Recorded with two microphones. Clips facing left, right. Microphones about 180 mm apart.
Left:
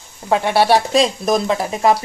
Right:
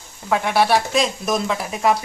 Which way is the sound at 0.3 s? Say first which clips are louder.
Left 3 dB; 30° left (ahead or behind).